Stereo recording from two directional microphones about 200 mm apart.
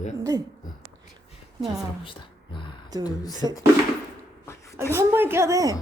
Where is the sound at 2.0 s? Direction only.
25° left (ahead or behind).